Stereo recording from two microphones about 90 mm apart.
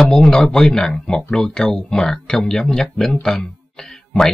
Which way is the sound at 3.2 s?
5° left (ahead or behind).